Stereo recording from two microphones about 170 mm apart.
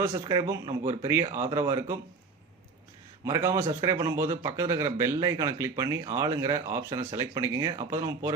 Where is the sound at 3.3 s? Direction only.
20° right (ahead or behind).